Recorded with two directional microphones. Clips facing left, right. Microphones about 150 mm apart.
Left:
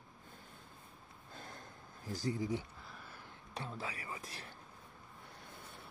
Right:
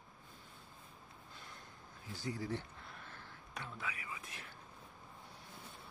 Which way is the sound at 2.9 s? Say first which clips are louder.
Even; 5° left (ahead or behind).